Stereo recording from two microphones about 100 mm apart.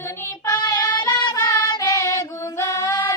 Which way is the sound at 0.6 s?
40° left (ahead or behind).